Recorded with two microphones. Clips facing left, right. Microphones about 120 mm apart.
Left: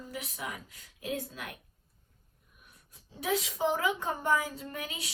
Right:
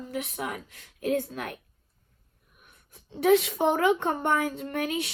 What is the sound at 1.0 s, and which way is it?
Speech, 65° right (ahead or behind).